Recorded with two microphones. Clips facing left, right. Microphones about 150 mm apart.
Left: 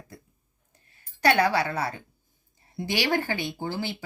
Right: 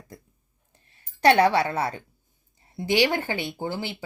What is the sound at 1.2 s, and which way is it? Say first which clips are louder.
Speech: right 4 dB; 30° right (ahead or behind).